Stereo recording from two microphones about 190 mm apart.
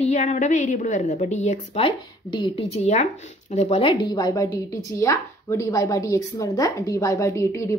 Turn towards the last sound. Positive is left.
turn(degrees=15)  # may be behind; listen again after turning